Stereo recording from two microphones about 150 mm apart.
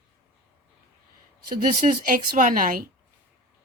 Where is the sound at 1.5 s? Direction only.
65° right (ahead or behind).